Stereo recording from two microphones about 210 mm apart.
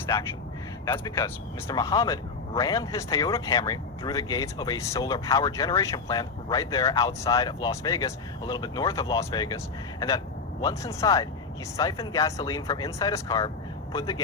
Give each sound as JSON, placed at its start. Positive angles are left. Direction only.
{"t": 0.9, "sound": "speech", "side_deg": 15}
{"t": 10.6, "sound": "speech", "side_deg": 15}